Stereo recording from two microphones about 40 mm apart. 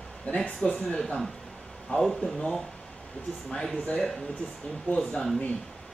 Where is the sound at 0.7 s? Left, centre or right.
Left.